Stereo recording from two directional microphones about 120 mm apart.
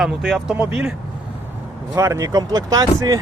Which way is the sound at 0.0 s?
5° right (ahead or behind).